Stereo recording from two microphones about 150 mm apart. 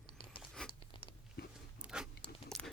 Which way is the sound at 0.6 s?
35° left (ahead or behind).